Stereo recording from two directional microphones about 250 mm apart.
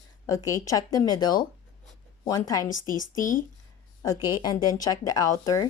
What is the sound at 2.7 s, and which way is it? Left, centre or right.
Speech, left.